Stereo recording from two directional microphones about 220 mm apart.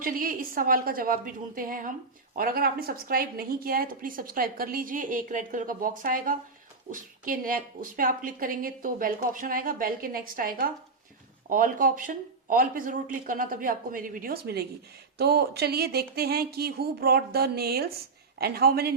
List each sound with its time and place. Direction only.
0.0 s a woman's voice: 40° right (ahead or behind)